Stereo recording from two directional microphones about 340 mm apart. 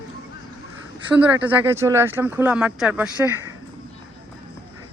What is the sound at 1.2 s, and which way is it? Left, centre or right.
Speech, centre.